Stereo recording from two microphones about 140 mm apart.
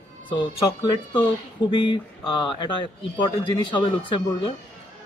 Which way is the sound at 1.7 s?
35° left (ahead or behind).